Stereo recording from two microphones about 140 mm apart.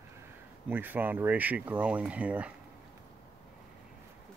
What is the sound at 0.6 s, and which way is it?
Speech, 15° right (ahead or behind).